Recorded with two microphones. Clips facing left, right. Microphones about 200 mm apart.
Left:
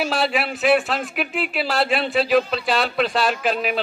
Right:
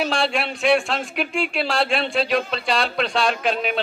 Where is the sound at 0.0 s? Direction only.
5° left (ahead or behind).